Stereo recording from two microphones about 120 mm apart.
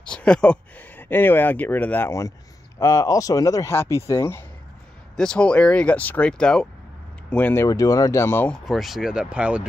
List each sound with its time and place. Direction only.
0.0 s speech: 10° left (ahead or behind)
5.1 s speech: 5° left (ahead or behind)
7.6 s speech: 30° left (ahead or behind)
8.5 s speech: centre (ahead or behind)